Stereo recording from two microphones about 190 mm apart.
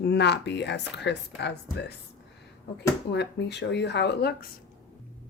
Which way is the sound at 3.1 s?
65° left (ahead or behind).